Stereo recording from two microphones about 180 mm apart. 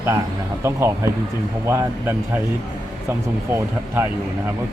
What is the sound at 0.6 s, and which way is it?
Speech, 15° right (ahead or behind).